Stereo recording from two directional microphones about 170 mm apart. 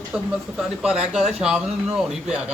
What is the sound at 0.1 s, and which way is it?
Speech, 5° right (ahead or behind).